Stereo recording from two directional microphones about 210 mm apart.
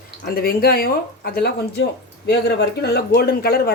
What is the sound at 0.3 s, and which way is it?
Speech, 45° left (ahead or behind).